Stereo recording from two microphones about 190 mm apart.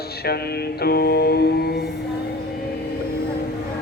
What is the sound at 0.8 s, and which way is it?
Music, 55° left (ahead or behind).